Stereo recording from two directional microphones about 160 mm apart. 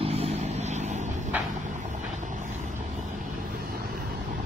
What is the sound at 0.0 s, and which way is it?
Vehicle, 40° right (ahead or behind).